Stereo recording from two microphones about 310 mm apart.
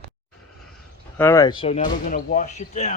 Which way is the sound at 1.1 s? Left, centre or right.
Centre.